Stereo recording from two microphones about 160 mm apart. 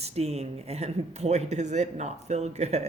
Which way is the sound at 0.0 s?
40° right (ahead or behind).